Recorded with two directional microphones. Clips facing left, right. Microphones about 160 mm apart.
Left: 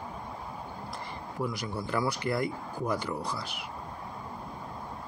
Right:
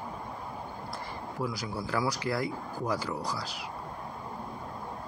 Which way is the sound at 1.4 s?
5° right (ahead or behind).